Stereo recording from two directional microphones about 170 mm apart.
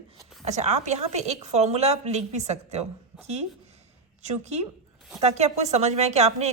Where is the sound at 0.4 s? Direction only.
40° right (ahead or behind).